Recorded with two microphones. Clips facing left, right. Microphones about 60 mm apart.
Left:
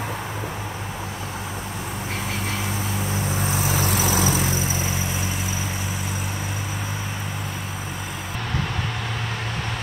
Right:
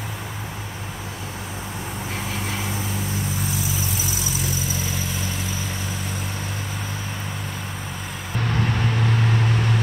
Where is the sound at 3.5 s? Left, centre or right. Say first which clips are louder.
Left 4 dB; left.